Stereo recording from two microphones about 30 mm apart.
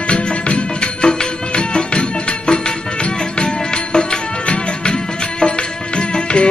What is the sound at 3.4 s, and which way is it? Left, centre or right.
Music, left.